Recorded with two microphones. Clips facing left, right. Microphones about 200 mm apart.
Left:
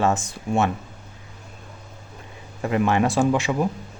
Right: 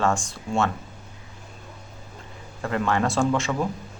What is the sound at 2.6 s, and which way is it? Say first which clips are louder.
A man's voice: left 3 dB; 15° left (ahead or behind).